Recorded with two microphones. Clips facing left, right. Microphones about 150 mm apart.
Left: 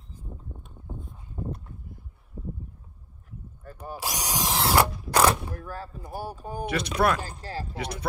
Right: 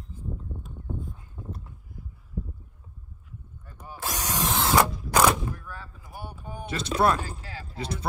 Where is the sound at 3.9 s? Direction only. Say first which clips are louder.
Even; 15° left (ahead or behind).